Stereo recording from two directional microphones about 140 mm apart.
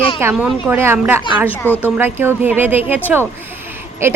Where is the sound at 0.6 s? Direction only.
15° right (ahead or behind).